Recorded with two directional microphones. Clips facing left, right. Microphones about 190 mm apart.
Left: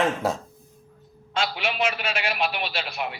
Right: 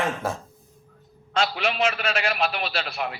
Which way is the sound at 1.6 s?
40° right (ahead or behind).